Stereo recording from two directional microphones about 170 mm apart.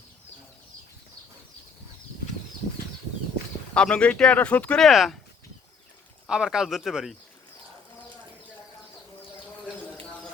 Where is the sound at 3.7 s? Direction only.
5° left (ahead or behind).